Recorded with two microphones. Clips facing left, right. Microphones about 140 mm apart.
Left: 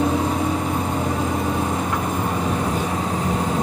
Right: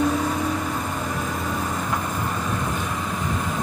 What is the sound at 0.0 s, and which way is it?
Vehicle, 25° left (ahead or behind).